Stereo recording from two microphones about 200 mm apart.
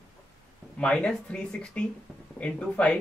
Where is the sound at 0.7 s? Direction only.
5° left (ahead or behind).